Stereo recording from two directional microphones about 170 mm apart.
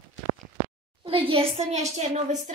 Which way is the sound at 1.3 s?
40° right (ahead or behind).